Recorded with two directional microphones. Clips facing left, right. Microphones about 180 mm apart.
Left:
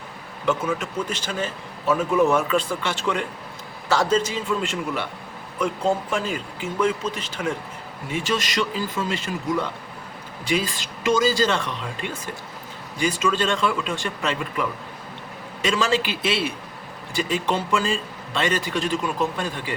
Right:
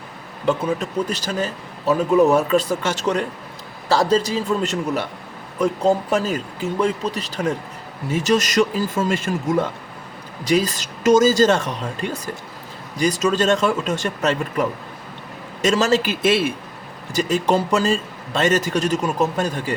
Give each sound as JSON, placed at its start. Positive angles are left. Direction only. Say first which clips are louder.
{"t": 0.4, "sound": "a man's voice", "louder": "right 3 dB", "side_deg": -35}